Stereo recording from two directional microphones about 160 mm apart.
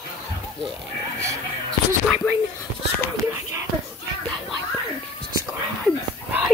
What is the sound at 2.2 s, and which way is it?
Speech, 15° left (ahead or behind).